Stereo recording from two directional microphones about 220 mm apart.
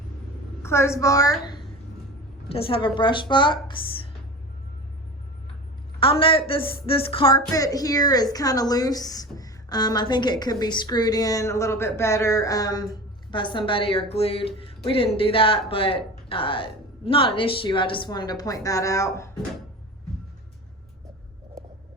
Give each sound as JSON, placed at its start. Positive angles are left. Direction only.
{"t": 0.6, "sound": "a woman's voice", "side_deg": 10}
{"t": 6.0, "sound": "a woman's voice", "side_deg": 25}